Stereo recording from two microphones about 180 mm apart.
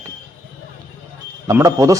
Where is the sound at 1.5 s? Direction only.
15° right (ahead or behind).